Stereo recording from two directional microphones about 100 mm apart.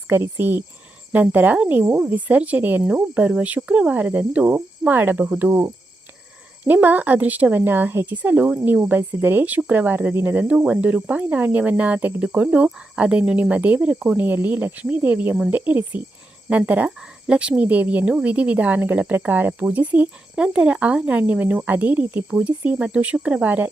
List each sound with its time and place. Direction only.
0.1 s speech: 20° right (ahead or behind)
5.5 s speech: 30° right (ahead or behind)
6.7 s speech: 20° right (ahead or behind)